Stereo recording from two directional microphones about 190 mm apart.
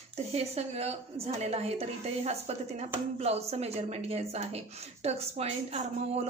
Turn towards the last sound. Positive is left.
turn(degrees=-35)  # may be behind; listen again after turning